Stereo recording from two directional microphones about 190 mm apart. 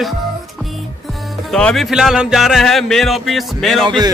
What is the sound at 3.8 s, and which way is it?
Speech, 25° right (ahead or behind).